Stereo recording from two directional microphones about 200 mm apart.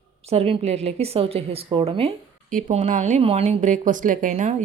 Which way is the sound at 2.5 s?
40° right (ahead or behind).